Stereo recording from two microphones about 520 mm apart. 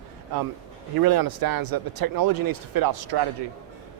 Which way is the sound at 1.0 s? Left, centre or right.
Right.